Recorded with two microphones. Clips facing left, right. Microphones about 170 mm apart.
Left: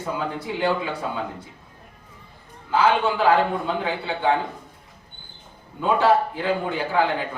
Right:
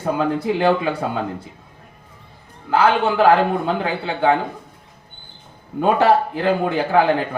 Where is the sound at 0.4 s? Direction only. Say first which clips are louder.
Right 5 dB; 70° right (ahead or behind).